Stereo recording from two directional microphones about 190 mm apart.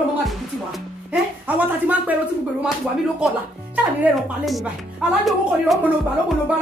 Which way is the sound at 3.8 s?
5° right (ahead or behind).